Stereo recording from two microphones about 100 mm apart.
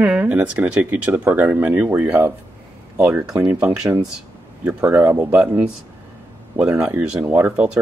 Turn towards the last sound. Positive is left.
turn(degrees=-15)  # may be behind; listen again after turning